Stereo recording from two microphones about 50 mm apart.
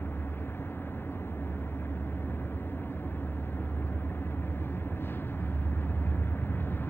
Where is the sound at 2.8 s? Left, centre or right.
Left.